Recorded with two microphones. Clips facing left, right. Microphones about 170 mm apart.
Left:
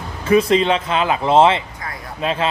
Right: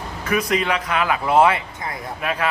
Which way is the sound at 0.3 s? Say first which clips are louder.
Left 7 dB; 25° left (ahead or behind).